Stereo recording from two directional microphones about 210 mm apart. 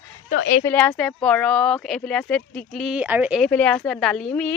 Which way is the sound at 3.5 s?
5° left (ahead or behind).